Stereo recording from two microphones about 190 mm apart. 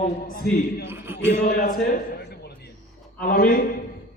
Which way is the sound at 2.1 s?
55° left (ahead or behind).